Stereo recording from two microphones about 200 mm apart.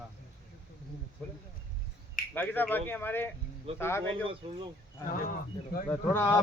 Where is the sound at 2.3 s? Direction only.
10° left (ahead or behind).